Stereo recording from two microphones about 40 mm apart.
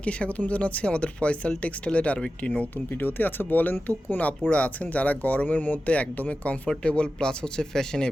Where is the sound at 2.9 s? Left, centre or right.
Left.